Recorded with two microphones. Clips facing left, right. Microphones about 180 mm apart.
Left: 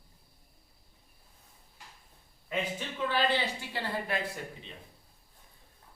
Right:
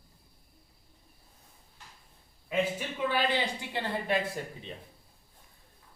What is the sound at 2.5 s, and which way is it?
Speech, 10° right (ahead or behind).